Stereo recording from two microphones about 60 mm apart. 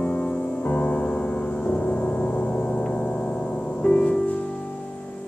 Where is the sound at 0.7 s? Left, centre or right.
Left.